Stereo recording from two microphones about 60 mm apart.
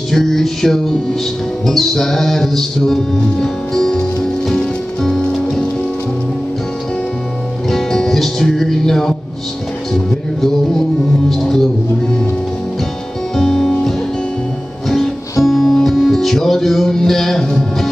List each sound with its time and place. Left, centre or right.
0.1 s music: centre
7.7 s music: centre
13.4 s music: centre
15.4 s music: centre